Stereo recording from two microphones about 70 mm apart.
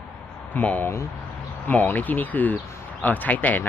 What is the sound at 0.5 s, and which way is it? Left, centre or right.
Speech, left.